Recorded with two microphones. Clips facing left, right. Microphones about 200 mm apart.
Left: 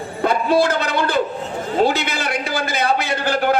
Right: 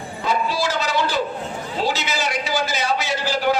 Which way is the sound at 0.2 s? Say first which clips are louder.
Left 6 dB; 55° left (ahead or behind).